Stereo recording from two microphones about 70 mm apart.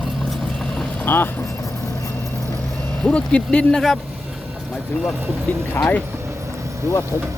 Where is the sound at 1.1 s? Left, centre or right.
Left.